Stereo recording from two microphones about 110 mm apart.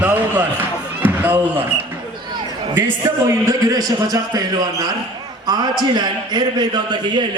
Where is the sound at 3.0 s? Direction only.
35° right (ahead or behind).